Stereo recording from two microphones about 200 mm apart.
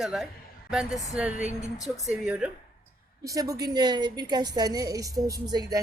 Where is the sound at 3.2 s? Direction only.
15° right (ahead or behind).